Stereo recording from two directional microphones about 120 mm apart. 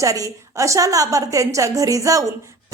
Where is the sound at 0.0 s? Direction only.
30° right (ahead or behind).